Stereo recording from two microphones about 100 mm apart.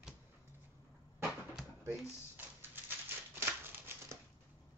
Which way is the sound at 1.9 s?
20° right (ahead or behind).